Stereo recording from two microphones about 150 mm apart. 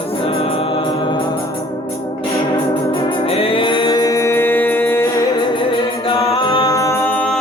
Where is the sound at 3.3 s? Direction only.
40° left (ahead or behind); by 5.1 s 15° left (ahead or behind).